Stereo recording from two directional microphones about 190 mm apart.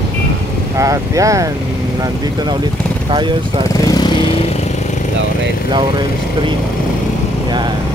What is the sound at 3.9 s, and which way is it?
Vehicle, 20° left (ahead or behind).